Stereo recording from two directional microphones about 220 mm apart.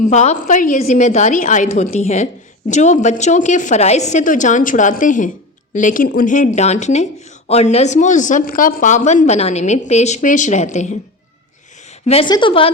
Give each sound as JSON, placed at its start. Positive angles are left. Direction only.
{"t": 0.1, "sound": "a woman's voice", "side_deg": 30}